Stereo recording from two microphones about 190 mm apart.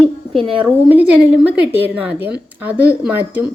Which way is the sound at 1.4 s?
10° right (ahead or behind).